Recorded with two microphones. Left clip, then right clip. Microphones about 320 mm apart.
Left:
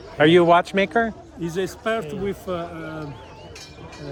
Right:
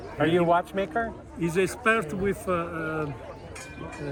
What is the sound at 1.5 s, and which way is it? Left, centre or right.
A man's voice, centre.